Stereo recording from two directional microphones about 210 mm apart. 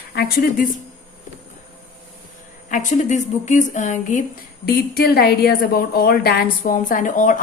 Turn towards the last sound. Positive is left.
turn(degrees=35)  # may be behind; listen again after turning